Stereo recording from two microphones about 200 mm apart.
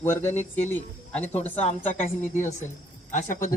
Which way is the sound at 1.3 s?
35° left (ahead or behind).